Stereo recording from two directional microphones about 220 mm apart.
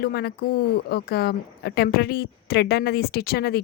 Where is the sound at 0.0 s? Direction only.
45° left (ahead or behind).